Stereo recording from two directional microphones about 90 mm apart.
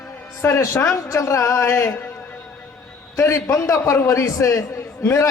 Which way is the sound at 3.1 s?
35° left (ahead or behind).